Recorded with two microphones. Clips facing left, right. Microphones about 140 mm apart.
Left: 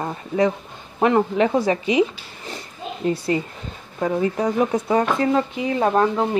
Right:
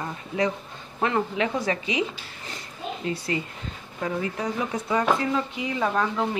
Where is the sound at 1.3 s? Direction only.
35° left (ahead or behind).